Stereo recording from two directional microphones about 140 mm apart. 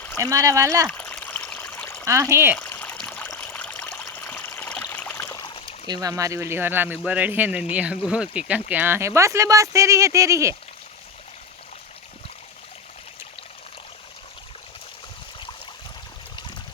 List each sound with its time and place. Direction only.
0.2 s speech: 20° right (ahead or behind)
0.9 s stream: 10° left (ahead or behind)
2.0 s speech: 20° right (ahead or behind)
2.6 s trickle: 10° left (ahead or behind)
3.2 s stream: 20° left (ahead or behind)
5.5 s a sound: 35° left (ahead or behind)
5.9 s speech: 25° right (ahead or behind)